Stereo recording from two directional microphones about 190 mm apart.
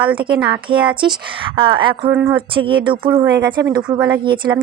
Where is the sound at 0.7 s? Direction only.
25° right (ahead or behind).